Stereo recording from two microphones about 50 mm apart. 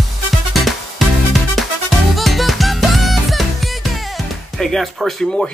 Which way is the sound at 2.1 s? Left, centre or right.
Centre.